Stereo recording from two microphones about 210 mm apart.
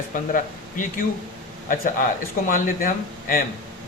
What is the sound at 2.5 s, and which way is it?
Speech, 40° left (ahead or behind).